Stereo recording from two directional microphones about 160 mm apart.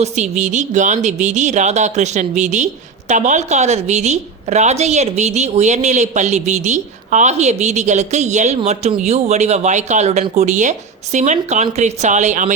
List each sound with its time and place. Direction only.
0.0 s a woman's voice: 45° right (ahead or behind)